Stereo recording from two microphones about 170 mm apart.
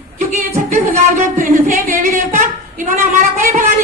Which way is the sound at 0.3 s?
50° right (ahead or behind).